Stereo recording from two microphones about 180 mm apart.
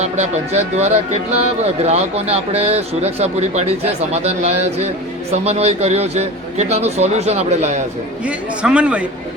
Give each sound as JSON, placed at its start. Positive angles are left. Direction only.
{"t": 0.0, "sound": "speech", "side_deg": -40}
{"t": 8.2, "sound": "a man's voice", "side_deg": -5}